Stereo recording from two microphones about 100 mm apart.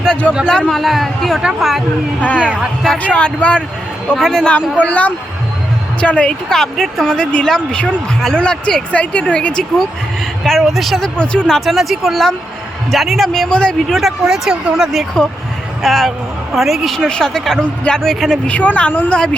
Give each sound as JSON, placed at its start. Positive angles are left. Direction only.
{"t": 0.0, "sound": "a man's voice", "side_deg": 10}
{"t": 2.2, "sound": "speech", "side_deg": 15}
{"t": 13.9, "sound": "speech", "side_deg": -5}